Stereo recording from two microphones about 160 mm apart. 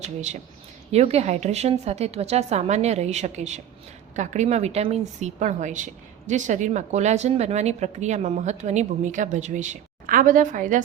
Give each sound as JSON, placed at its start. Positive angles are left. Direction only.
{"t": 0.0, "sound": "a woman's voice", "side_deg": -50}